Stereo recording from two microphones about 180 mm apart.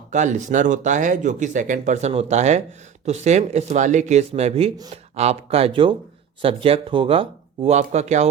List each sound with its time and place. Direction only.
0.1 s speech: 40° right (ahead or behind)